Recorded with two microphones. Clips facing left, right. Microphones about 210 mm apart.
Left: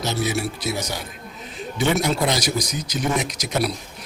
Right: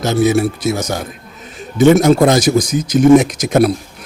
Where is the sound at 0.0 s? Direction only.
50° right (ahead or behind).